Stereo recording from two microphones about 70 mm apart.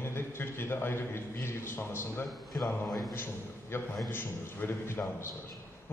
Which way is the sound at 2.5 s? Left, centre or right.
Left.